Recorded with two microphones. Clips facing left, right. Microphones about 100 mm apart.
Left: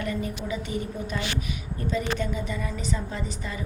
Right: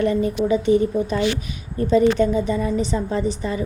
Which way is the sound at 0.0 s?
35° right (ahead or behind).